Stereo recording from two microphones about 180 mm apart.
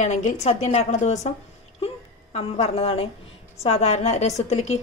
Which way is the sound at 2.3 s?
35° left (ahead or behind).